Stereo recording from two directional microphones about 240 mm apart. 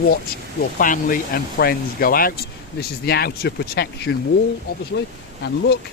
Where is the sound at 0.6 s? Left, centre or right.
Left.